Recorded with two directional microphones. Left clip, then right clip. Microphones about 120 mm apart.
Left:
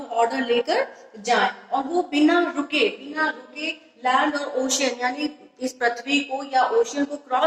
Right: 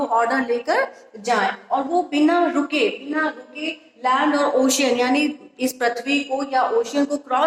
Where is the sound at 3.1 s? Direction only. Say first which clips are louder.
Right 1 dB; 25° right (ahead or behind).